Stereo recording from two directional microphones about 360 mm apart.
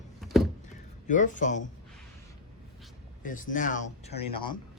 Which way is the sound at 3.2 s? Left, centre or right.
Left.